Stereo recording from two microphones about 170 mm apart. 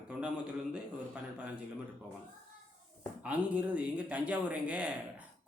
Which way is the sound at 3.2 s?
10° right (ahead or behind).